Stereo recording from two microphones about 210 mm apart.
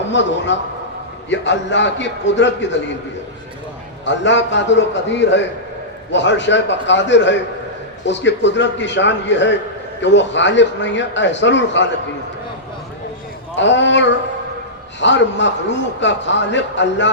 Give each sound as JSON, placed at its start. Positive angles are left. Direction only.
{"t": 0.1, "sound": "a man's voice", "side_deg": 60}
{"t": 4.0, "sound": "a man's voice", "side_deg": 60}
{"t": 13.6, "sound": "a man's voice", "side_deg": 60}